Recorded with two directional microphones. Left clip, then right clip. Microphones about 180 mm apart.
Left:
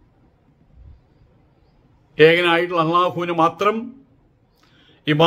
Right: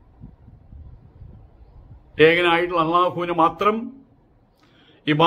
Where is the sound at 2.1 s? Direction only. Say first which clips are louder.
Left 2 dB; 10° left (ahead or behind).